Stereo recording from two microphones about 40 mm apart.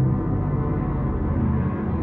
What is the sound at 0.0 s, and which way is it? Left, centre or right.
Music, right.